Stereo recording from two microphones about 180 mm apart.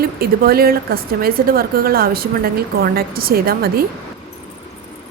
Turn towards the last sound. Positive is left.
turn(degrees=-55)  # may be behind; listen again after turning